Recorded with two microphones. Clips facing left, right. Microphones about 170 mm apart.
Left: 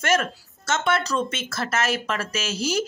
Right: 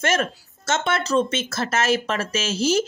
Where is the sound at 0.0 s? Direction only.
25° right (ahead or behind).